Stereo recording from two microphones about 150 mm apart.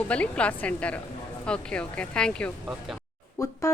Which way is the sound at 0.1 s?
10° left (ahead or behind).